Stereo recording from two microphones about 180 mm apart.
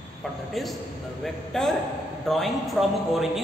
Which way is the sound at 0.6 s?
Centre (ahead or behind).